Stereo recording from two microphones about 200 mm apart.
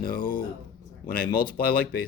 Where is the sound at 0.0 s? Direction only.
45° left (ahead or behind).